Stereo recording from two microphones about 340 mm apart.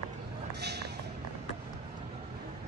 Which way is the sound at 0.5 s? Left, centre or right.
Right.